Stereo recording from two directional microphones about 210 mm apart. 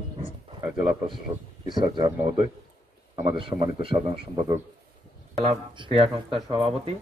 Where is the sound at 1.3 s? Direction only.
20° right (ahead or behind).